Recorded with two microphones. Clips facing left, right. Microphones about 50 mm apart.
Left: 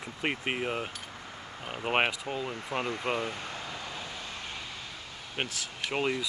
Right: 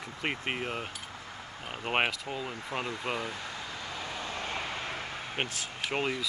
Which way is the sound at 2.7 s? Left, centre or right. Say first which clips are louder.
Left 2 dB; left.